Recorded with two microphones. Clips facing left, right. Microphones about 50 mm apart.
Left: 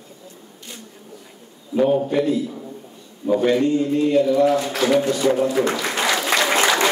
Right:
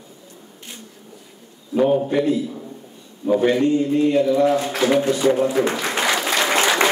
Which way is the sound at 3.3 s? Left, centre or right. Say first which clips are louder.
Right 1 dB; centre.